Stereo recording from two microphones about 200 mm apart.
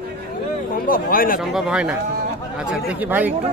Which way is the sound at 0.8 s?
45° left (ahead or behind).